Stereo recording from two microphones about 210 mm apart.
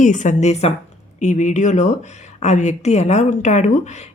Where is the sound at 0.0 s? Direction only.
35° left (ahead or behind).